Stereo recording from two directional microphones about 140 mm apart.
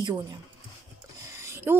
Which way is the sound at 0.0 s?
30° right (ahead or behind).